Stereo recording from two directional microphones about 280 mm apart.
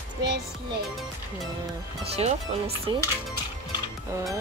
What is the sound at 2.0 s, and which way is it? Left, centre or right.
Speech, right.